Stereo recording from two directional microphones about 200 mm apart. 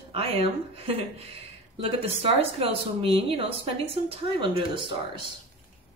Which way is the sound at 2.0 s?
30° right (ahead or behind).